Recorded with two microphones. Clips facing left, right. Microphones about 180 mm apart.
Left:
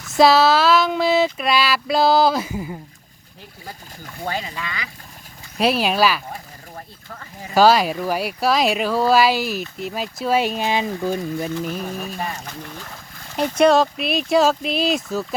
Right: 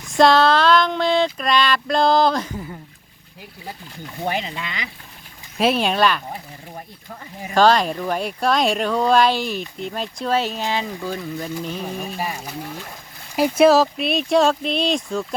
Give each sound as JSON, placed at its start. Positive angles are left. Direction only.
{"t": 0.1, "sound": "speech", "side_deg": 5}
{"t": 4.2, "sound": "speech", "side_deg": -20}
{"t": 5.5, "sound": "speech", "side_deg": 0}
{"t": 7.5, "sound": "speech", "side_deg": 5}
{"t": 11.6, "sound": "speech", "side_deg": 5}
{"t": 12.2, "sound": "speech", "side_deg": -10}